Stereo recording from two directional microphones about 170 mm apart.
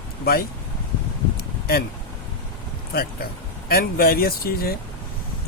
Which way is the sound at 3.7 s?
60° left (ahead or behind).